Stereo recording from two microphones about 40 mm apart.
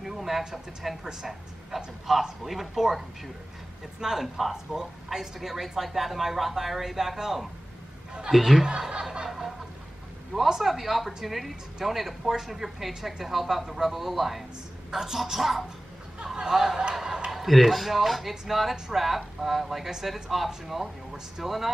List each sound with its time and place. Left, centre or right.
0.0 s a sound: centre
1.0 s speech: centre
4.0 s speech: centre
8.6 s speech: centre
10.3 s speech: centre
17.0 s a sound: centre
17.4 s speech: centre